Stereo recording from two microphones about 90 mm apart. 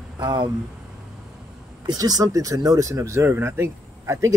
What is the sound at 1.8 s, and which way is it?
Speech, 45° right (ahead or behind).